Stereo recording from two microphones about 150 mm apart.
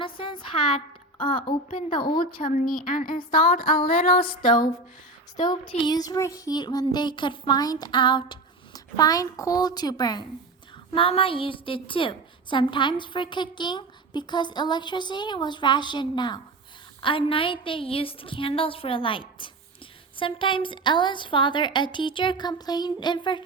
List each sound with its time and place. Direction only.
0.0 s a woman's voice: 35° left (ahead or behind)
2.2 s music: 70° left (ahead or behind)
5.4 s a child's voice: 30° left (ahead or behind)
10.9 s a woman's voice: 35° left (ahead or behind)